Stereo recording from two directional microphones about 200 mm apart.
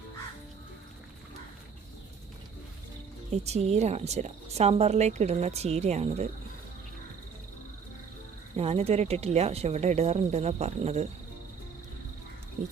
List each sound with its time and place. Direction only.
3.4 s speech: 35° right (ahead or behind)
8.5 s speech: 30° right (ahead or behind)
12.6 s speech: 35° right (ahead or behind)